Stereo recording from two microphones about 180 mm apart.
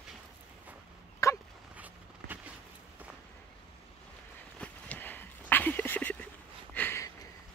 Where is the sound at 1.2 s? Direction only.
15° left (ahead or behind).